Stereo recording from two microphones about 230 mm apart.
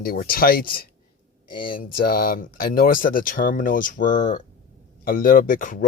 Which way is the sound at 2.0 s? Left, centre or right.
Left.